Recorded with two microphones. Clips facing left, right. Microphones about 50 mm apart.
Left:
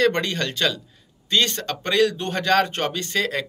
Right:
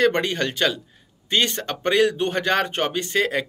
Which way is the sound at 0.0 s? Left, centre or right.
Centre.